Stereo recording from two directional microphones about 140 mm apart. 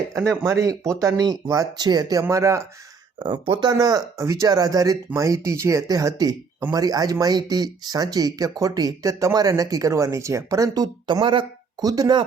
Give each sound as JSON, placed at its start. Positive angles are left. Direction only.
{"t": 0.1, "sound": "speech", "side_deg": -20}
{"t": 3.2, "sound": "speech", "side_deg": -35}